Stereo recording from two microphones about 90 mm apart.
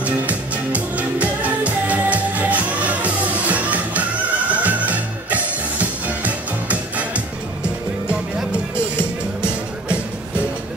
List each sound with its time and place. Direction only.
0.0 s music: 15° right (ahead or behind)
8.9 s music: 10° right (ahead or behind)